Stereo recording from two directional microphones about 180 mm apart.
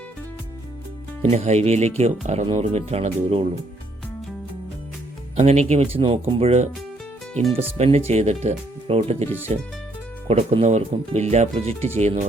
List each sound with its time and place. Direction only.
1.2 s speech: 35° right (ahead or behind)
5.4 s speech: 40° right (ahead or behind)
7.8 s speech: 35° right (ahead or behind)